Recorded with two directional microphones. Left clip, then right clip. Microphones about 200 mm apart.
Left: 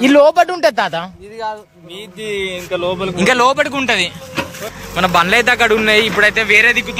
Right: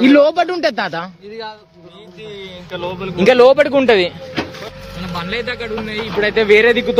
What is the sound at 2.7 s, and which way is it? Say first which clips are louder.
Speech: left 5 dB; 40° left (ahead or behind).